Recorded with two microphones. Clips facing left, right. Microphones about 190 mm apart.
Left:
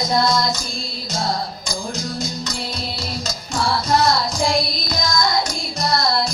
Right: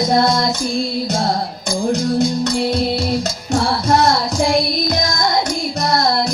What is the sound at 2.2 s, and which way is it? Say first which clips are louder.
Music: right 11 dB; 60° right (ahead or behind).